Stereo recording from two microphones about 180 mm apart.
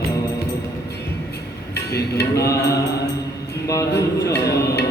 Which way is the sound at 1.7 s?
65° left (ahead or behind).